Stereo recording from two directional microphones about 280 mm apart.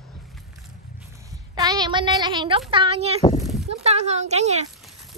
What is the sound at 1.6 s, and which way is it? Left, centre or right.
A child's voice, centre.